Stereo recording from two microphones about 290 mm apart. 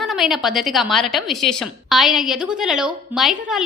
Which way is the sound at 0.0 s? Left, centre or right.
Centre.